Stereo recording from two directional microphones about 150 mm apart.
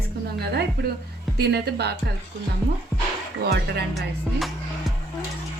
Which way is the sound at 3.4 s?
90° right.